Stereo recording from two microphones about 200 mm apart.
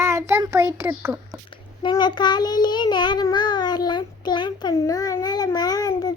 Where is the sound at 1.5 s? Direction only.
25° left (ahead or behind).